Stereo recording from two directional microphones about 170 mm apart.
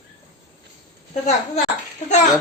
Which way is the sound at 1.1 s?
40° left (ahead or behind).